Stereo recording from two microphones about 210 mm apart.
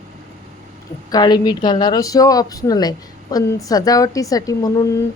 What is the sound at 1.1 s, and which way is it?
A woman's voice, 20° left (ahead or behind).